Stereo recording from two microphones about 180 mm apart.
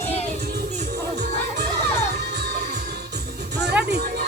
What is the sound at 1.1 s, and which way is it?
Music, 65° right (ahead or behind).